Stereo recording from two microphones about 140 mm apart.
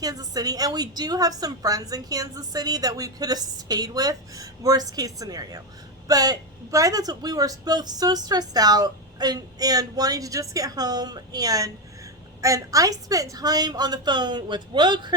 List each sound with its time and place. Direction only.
0.0 s a woman's voice: 25° right (ahead or behind)